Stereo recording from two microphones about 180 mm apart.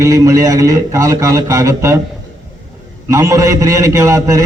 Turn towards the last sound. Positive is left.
turn(degrees=-15)  # may be behind; listen again after turning